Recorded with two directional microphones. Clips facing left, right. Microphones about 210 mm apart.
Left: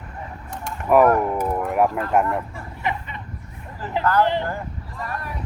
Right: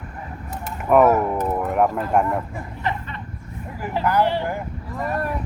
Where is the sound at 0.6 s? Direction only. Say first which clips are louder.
Even; centre (ahead or behind).